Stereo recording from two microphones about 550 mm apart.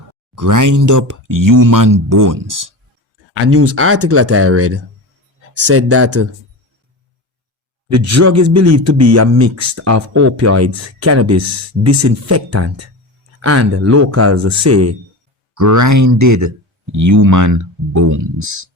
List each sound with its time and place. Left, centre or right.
0.3 s speech: right
3.3 s speech: right
7.9 s speech: right